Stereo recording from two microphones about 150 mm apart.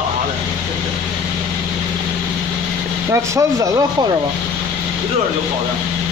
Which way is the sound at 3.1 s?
20° right (ahead or behind).